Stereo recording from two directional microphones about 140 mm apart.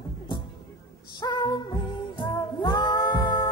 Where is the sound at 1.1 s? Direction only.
30° left (ahead or behind).